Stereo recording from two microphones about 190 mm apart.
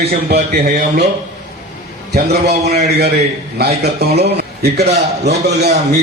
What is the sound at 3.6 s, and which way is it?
A man's voice, 55° right (ahead or behind).